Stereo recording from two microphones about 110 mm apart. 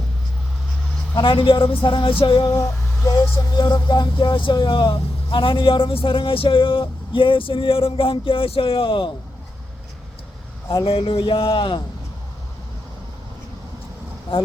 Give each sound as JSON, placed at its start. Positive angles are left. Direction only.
{"t": 1.1, "sound": "speech", "side_deg": 50}
{"t": 3.1, "sound": "speech", "side_deg": 35}
{"t": 10.8, "sound": "speech", "side_deg": 60}
{"t": 14.3, "sound": "speech", "side_deg": 60}